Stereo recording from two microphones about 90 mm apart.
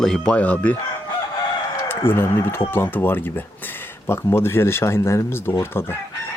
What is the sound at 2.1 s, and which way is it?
Speech, 25° left (ahead or behind).